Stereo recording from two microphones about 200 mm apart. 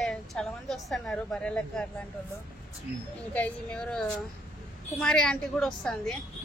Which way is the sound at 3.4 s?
5° left (ahead or behind).